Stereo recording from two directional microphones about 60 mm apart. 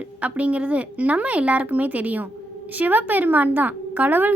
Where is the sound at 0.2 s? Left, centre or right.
Right.